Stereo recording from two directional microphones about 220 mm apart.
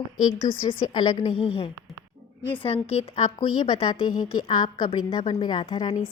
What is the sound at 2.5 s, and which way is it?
A woman's voice, 25° left (ahead or behind).